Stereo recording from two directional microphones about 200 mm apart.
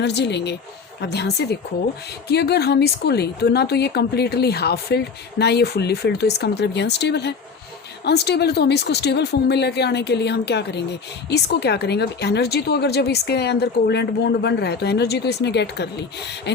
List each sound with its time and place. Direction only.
0.0 s a woman's voice: 55° left (ahead or behind)